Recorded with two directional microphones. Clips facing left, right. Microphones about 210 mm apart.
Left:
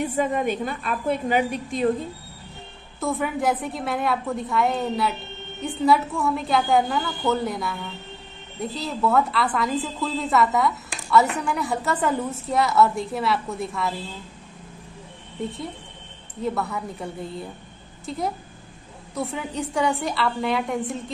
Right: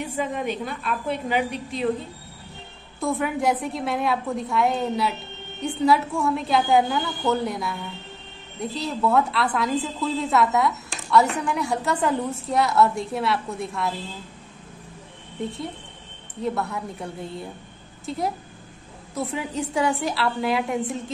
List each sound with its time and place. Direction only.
0.0 s a woman's voice: 50° left (ahead or behind)
3.0 s a woman's voice: centre (ahead or behind)
15.4 s a woman's voice: centre (ahead or behind)